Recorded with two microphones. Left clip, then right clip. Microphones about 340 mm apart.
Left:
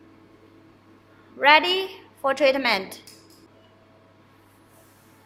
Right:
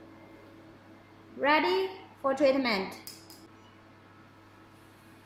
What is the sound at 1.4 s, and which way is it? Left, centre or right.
A woman's voice, left.